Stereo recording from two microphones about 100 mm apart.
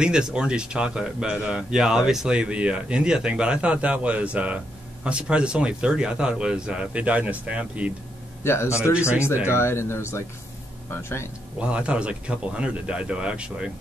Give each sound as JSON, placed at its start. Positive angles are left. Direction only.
{"t": 0.0, "sound": "a man's voice", "side_deg": -10}
{"t": 8.5, "sound": "speech", "side_deg": 25}
{"t": 11.6, "sound": "a man's voice", "side_deg": -10}